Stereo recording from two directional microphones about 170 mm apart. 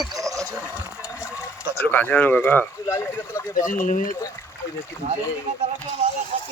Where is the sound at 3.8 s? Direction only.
50° left (ahead or behind).